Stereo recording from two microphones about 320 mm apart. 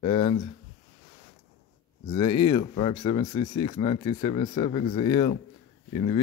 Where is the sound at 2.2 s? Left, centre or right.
Left.